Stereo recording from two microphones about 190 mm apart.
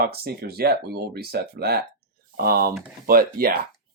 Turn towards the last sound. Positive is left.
turn(degrees=-50)  # may be behind; listen again after turning